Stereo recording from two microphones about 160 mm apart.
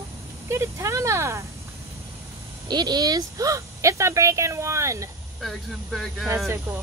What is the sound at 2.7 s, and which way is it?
Speech, 25° right (ahead or behind).